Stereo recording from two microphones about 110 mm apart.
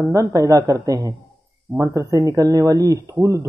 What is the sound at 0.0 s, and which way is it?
Speech, 30° right (ahead or behind).